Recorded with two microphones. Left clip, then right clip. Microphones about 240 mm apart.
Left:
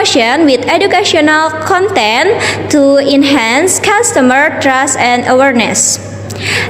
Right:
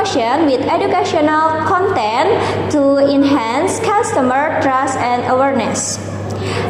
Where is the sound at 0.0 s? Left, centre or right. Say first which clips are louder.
Left 5 dB; left.